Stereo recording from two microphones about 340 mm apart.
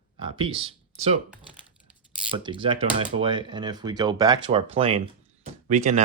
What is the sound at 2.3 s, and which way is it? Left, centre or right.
Speech, centre.